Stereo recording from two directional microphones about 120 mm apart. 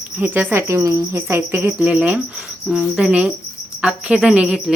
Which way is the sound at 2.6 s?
10° right (ahead or behind).